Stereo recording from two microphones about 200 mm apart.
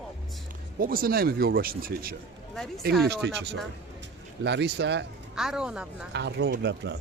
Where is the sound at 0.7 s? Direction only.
45° right (ahead or behind).